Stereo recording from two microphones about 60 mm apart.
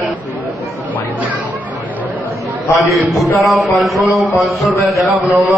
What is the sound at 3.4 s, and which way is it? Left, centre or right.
A man's voice, centre.